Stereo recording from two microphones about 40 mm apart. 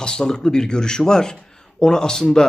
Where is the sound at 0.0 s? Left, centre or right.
Centre.